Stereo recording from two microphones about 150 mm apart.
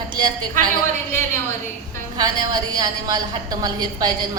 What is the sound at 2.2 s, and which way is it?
A woman's voice, 25° right (ahead or behind).